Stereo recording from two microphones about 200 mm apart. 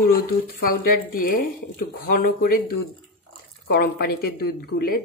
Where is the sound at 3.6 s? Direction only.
50° left (ahead or behind).